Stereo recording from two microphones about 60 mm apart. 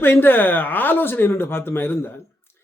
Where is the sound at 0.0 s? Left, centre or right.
Left.